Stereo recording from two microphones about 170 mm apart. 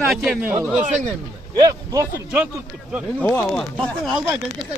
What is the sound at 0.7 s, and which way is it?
Speech, 45° right (ahead or behind).